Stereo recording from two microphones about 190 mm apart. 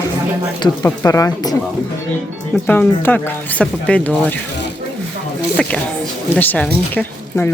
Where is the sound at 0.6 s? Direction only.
20° left (ahead or behind).